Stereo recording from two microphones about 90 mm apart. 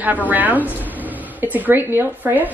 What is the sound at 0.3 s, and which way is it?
A woman's voice, 20° right (ahead or behind).